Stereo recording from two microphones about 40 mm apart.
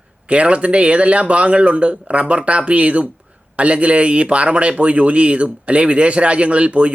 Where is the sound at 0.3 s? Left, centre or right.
Right.